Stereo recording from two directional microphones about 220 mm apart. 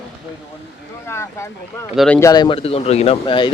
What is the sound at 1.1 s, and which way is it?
Boat, 10° left (ahead or behind).